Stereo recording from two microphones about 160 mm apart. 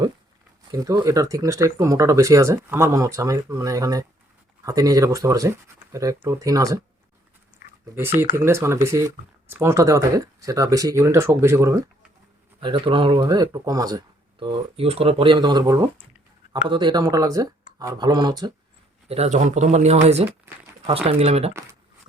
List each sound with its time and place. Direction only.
0.7 s speech: 20° right (ahead or behind)
8.4 s speech: 15° right (ahead or behind)
12.5 s speech: 30° right (ahead or behind)
13.2 s speech: 25° right (ahead or behind)
19.0 s speech: 40° right (ahead or behind)
20.5 s a sound: 15° right (ahead or behind)
20.8 s speech: 35° right (ahead or behind)